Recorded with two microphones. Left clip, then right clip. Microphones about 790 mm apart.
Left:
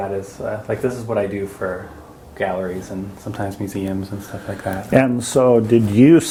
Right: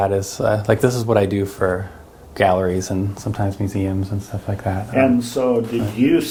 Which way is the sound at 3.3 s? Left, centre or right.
Centre.